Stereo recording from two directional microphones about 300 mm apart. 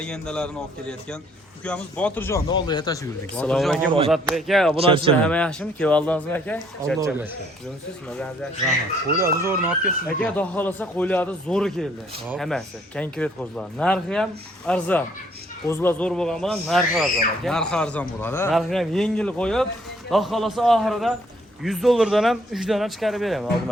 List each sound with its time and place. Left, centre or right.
0.0 s speech: centre
4.7 s speech: centre
5.2 s speech: centre
7.0 s speech: centre
9.1 s speech: centre